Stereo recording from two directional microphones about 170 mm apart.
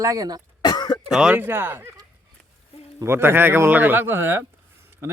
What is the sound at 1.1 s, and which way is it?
A man's voice, 5° right (ahead or behind).